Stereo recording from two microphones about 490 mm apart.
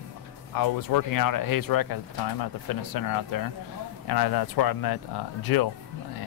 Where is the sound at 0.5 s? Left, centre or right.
Left.